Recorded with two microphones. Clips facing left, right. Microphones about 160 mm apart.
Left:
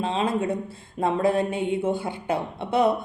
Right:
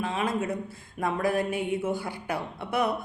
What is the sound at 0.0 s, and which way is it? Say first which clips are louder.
Speech: left 4 dB; 25° left (ahead or behind).